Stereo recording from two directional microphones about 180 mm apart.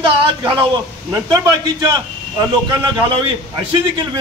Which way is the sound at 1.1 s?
20° right (ahead or behind).